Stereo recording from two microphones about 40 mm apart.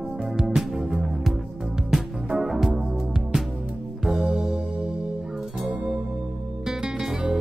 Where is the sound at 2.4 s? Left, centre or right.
Centre.